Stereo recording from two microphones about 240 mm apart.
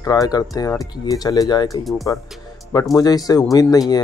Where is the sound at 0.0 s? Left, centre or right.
Centre.